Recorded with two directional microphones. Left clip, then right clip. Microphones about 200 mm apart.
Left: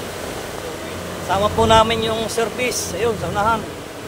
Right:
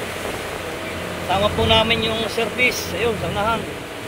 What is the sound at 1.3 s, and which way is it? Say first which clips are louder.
Speech: left 2 dB; 15° left (ahead or behind).